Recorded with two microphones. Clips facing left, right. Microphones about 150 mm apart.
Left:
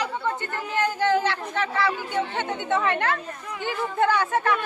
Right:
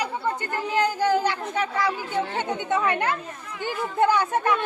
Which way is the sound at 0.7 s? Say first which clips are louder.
Even; 10° right (ahead or behind).